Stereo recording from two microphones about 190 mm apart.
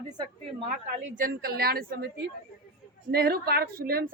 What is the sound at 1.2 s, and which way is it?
Speech, 50° right (ahead or behind).